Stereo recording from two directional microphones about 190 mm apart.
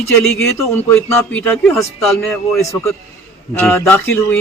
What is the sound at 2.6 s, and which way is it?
A man's voice, 15° left (ahead or behind).